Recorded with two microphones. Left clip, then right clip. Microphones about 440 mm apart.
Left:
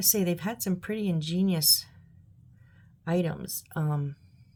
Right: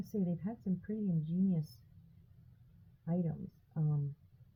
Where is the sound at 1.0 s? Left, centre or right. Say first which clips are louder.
Left 6 dB; left.